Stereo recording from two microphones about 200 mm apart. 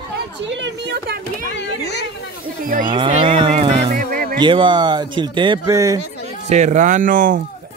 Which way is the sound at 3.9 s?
45° right (ahead or behind).